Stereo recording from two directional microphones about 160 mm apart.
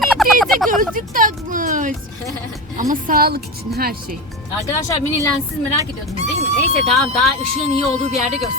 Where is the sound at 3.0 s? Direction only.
65° right (ahead or behind).